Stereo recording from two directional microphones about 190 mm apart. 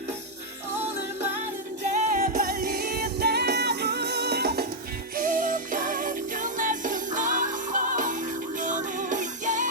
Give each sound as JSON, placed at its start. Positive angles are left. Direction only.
{"t": 1.9, "sound": "music", "side_deg": -40}
{"t": 5.1, "sound": "music", "side_deg": -45}